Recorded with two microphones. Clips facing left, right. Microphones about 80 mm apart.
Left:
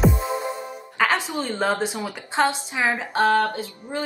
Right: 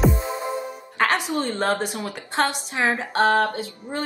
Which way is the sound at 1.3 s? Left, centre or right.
Centre.